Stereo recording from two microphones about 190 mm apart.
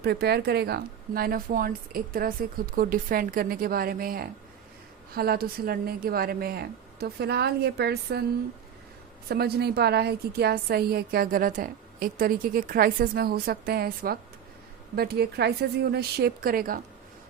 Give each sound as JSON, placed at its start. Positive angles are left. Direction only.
{"t": 0.0, "sound": "a woman's voice", "side_deg": -60}
{"t": 9.3, "sound": "a woman's voice", "side_deg": -55}